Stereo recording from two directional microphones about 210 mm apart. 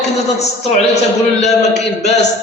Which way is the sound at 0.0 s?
30° left (ahead or behind).